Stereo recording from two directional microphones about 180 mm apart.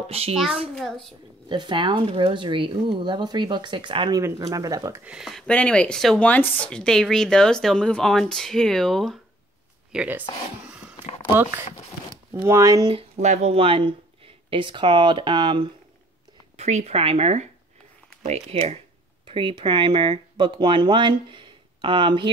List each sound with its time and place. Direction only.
0.1 s speech: 35° right (ahead or behind)
0.7 s speech: 5° left (ahead or behind)
1.5 s speech: 25° right (ahead or behind)
5.0 s speech: 5° right (ahead or behind)
9.9 s speech: 10° right (ahead or behind)
12.3 s speech: 15° right (ahead or behind)
12.9 s speech: 35° right (ahead or behind)
16.5 s speech: 40° right (ahead or behind)
19.2 s speech: 25° right (ahead or behind)